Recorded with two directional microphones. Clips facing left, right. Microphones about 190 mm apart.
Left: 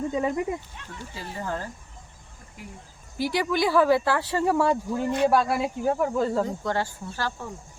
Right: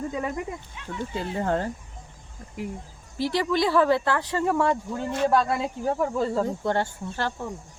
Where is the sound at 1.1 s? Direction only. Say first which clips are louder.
Right 6 dB; 60° right (ahead or behind).